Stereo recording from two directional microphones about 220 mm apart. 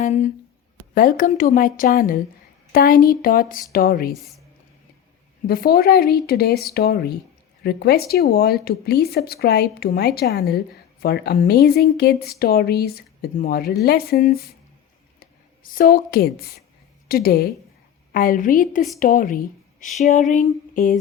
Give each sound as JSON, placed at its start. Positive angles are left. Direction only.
{"t": 0.0, "sound": "a woman's voice", "side_deg": 35}
{"t": 5.5, "sound": "a woman's voice", "side_deg": 45}
{"t": 20.3, "sound": "a sound", "side_deg": 35}